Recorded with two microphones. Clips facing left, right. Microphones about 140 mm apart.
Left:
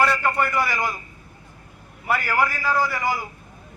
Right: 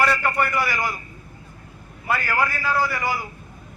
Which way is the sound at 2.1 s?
10° left (ahead or behind).